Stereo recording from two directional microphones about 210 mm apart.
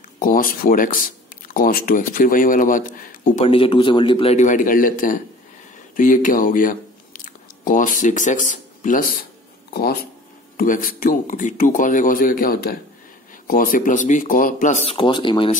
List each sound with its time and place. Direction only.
0.2 s speech: 40° left (ahead or behind)
3.4 s a man's voice: 25° left (ahead or behind); by 9.3 s 40° left (ahead or behind)
10.6 s speech: 40° left (ahead or behind); by 15.5 s 25° left (ahead or behind)